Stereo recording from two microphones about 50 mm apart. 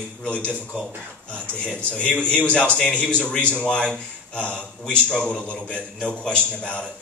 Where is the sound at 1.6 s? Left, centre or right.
Left.